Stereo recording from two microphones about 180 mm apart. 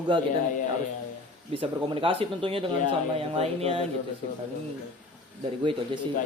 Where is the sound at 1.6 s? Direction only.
30° right (ahead or behind).